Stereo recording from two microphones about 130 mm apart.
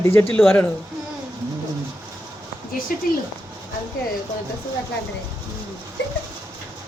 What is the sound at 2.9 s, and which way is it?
Speech, 90° left.